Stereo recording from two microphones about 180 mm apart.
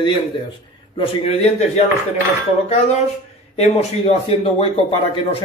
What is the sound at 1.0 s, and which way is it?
Speech, 35° left (ahead or behind).